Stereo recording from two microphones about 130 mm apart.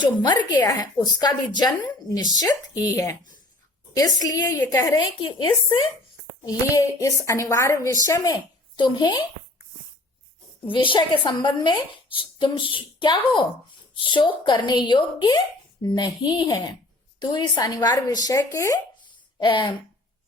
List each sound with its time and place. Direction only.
0.0 s a woman's voice: 35° left (ahead or behind)
10.7 s a woman's voice: 40° left (ahead or behind); by 18.8 s 25° left (ahead or behind)
19.4 s a woman's voice: 35° left (ahead or behind)